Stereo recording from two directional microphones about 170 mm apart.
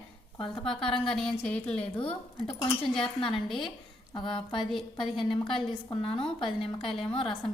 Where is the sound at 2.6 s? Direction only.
20° left (ahead or behind).